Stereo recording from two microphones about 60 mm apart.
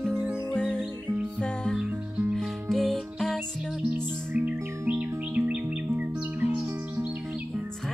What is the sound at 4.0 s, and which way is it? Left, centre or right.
Music, right.